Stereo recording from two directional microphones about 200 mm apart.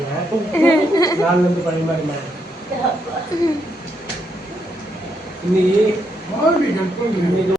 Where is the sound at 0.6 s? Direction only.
15° left (ahead or behind).